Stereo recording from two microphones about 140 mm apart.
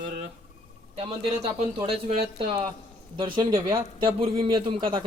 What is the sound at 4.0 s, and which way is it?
A man's voice, 35° right (ahead or behind).